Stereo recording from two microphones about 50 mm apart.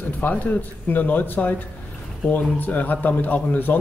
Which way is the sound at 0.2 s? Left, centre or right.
Left.